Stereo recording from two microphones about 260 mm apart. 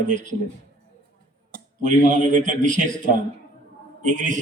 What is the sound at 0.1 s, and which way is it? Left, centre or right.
Speech, right.